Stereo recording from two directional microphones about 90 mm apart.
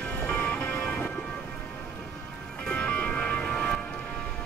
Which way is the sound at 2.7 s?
15° left (ahead or behind).